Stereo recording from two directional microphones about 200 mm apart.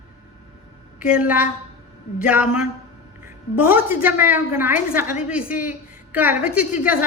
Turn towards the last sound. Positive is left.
turn(degrees=-5)  # may be behind; listen again after turning